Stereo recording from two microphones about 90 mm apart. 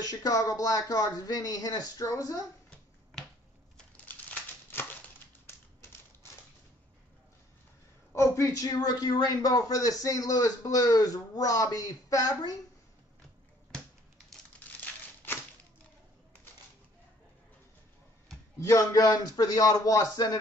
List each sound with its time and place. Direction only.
0.0 s speech: 45° left (ahead or behind)
3.7 s a sound: 15° left (ahead or behind)
8.1 s a man's voice: 30° left (ahead or behind)
18.6 s a man's voice: 35° left (ahead or behind)